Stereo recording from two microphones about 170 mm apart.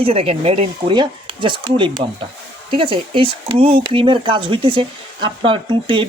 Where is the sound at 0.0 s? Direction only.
35° right (ahead or behind).